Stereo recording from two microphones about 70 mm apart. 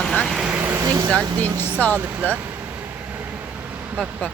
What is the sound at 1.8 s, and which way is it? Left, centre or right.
Speech, left.